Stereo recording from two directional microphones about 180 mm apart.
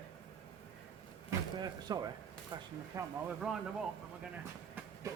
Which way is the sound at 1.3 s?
25° right (ahead or behind).